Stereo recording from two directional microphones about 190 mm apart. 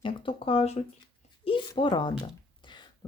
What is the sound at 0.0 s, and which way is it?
Speech, 25° left (ahead or behind).